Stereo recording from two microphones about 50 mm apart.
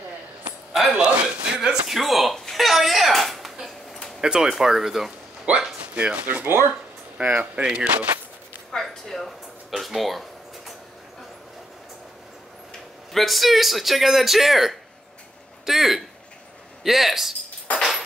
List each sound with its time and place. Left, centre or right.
0.8 s a man's voice: right
1.9 s a sound: centre
4.2 s speech: centre
5.9 s a man's voice: right
6.4 s speech: right
7.2 s a man's voice: right
8.7 s a sound: centre
13.1 s a man's voice: centre